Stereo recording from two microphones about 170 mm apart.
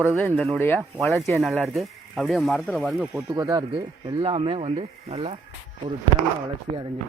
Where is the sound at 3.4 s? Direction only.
20° right (ahead or behind).